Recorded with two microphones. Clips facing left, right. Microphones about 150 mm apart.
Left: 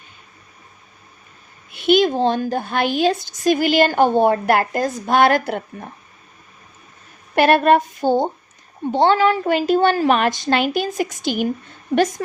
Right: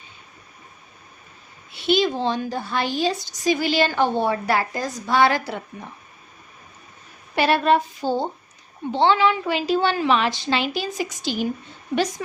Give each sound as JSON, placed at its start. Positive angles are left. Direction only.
{"t": 1.7, "sound": "a woman's voice", "side_deg": 55}
{"t": 7.3, "sound": "a sound", "side_deg": 55}
{"t": 8.9, "sound": "a woman's voice", "side_deg": 45}